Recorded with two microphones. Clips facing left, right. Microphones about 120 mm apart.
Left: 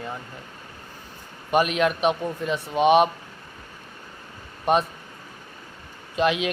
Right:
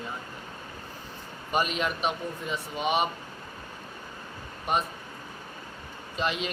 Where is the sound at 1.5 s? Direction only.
65° left (ahead or behind).